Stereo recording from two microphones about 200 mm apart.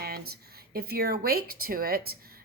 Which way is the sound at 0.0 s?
50° right (ahead or behind).